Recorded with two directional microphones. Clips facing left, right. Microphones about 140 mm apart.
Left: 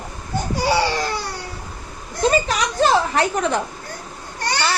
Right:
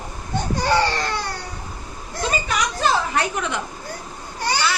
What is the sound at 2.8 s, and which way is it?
Speech, 35° left (ahead or behind).